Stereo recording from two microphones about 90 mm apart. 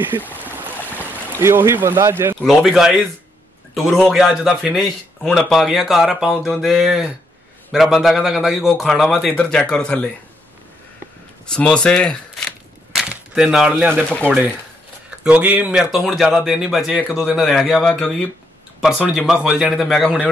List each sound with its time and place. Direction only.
0.3 s boat: 20° right (ahead or behind)
1.4 s speech: 25° right (ahead or behind)
2.4 s a man's voice: centre (ahead or behind)
9.3 s speech: 10° left (ahead or behind)
11.5 s speech: 10° left (ahead or behind)
12.9 s a sound: 10° right (ahead or behind)
14.0 s speech: 15° left (ahead or behind)
15.2 s speech: 15° right (ahead or behind)
15.9 s a man's voice: 5° right (ahead or behind)
17.9 s speech: 15° left (ahead or behind)
18.8 s a man's voice: 5° right (ahead or behind)